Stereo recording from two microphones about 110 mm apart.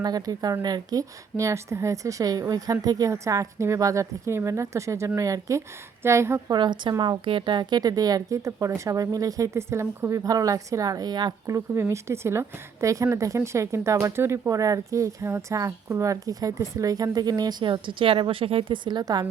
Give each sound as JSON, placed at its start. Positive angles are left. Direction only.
{"t": 0.0, "sound": "speech", "side_deg": -35}
{"t": 6.5, "sound": "a woman's voice", "side_deg": -45}
{"t": 11.4, "sound": "speech", "side_deg": -25}
{"t": 18.9, "sound": "speech", "side_deg": -40}